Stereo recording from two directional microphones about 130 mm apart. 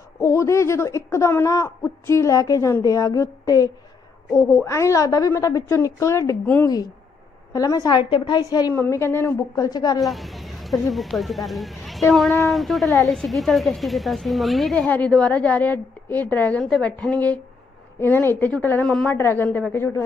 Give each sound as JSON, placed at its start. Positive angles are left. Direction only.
{"t": 0.2, "sound": "speech", "side_deg": 25}
{"t": 9.7, "sound": "a woman's voice", "side_deg": 30}
{"t": 9.9, "sound": "a woman's voice", "side_deg": 0}